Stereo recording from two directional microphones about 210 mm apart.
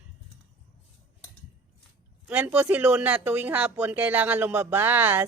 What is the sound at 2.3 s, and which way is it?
Speech, 5° right (ahead or behind).